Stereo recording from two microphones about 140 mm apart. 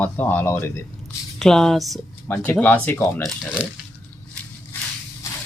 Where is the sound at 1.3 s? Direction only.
5° left (ahead or behind).